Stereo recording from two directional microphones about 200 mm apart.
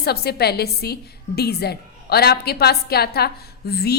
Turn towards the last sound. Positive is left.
turn(degrees=55)  # may be behind; listen again after turning